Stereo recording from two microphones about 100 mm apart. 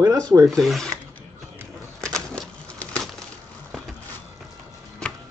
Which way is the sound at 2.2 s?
5° left (ahead or behind).